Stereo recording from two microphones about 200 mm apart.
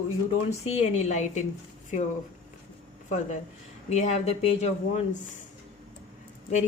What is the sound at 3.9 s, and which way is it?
Speech, 35° left (ahead or behind).